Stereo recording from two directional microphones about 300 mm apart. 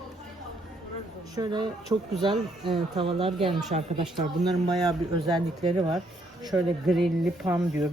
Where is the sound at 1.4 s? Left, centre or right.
Centre.